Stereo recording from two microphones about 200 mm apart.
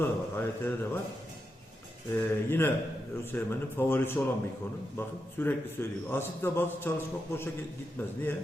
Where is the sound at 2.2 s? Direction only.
10° left (ahead or behind).